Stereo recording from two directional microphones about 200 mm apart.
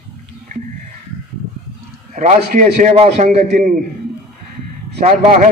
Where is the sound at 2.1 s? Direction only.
35° right (ahead or behind).